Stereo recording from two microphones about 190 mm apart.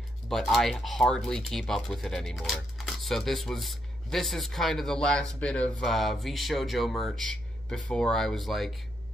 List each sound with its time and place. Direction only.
0.3 s speech: centre (ahead or behind)